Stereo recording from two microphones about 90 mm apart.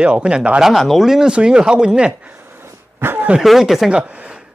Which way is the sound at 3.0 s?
25° right (ahead or behind).